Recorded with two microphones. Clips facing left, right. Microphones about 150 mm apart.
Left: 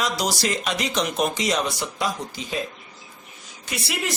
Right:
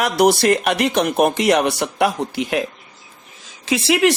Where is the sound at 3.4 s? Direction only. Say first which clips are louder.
Right 12 dB; 90° right.